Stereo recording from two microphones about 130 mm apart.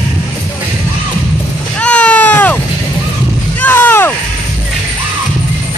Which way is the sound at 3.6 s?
15° left (ahead or behind).